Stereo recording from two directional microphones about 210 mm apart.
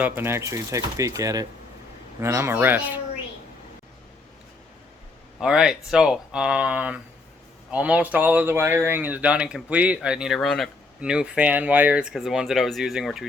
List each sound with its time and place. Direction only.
0.0 s speech: 10° right (ahead or behind)
5.4 s speech: 5° right (ahead or behind)